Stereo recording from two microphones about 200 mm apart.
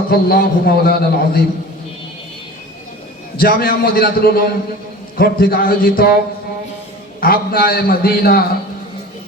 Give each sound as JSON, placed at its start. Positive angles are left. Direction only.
{"t": 0.1, "sound": "a man's voice", "side_deg": 50}
{"t": 3.3, "sound": "a man's voice", "side_deg": 50}
{"t": 7.2, "sound": "a man's voice", "side_deg": 50}